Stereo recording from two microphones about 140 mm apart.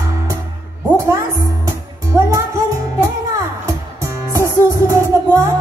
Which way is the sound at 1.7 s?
25° right (ahead or behind).